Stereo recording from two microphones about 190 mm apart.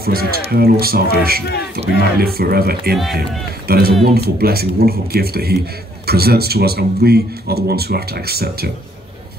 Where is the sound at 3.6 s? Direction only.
50° right (ahead or behind).